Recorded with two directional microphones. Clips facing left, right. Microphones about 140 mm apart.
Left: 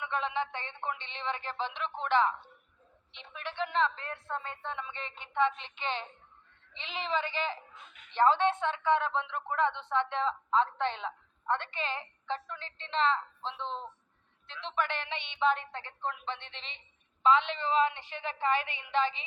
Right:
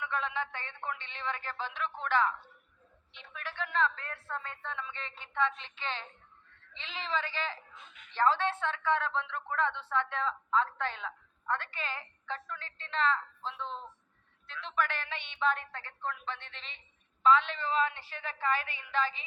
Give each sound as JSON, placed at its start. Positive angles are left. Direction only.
{"t": 0.0, "sound": "a woman's voice", "side_deg": 20}
{"t": 16.5, "sound": "a woman's voice", "side_deg": -40}
{"t": 17.2, "sound": "a woman's voice", "side_deg": 20}